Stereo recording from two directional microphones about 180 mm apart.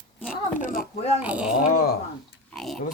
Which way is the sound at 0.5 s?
50° left (ahead or behind).